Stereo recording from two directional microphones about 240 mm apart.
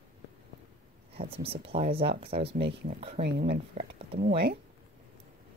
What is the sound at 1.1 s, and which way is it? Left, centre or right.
Speech, right.